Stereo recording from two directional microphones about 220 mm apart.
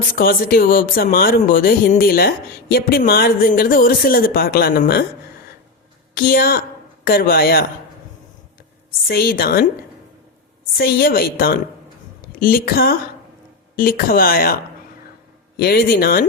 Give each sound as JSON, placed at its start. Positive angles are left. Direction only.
{"t": 0.2, "sound": "speech", "side_deg": 40}
{"t": 6.1, "sound": "a woman's voice", "side_deg": 45}
{"t": 9.0, "sound": "a woman's voice", "side_deg": 45}
{"t": 10.8, "sound": "a woman's voice", "side_deg": 45}